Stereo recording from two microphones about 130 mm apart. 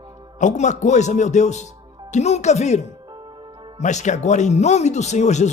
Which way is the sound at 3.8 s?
65° left (ahead or behind).